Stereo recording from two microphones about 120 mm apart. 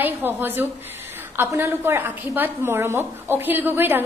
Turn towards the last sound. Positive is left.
turn(degrees=-15)  # may be behind; listen again after turning